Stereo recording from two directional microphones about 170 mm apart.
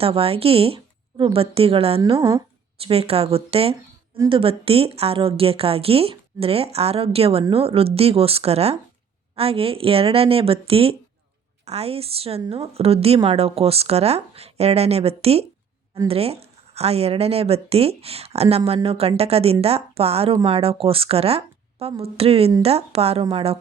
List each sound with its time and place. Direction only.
0.0 s speech: 35° right (ahead or behind)